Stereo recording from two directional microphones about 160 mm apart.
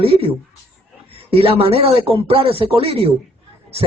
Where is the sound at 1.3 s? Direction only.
40° right (ahead or behind).